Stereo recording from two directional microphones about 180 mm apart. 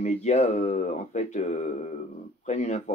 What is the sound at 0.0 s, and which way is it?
Mantra, 40° left (ahead or behind).